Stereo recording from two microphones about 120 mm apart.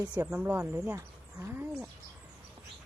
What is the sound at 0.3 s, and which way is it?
Speech, 10° right (ahead or behind).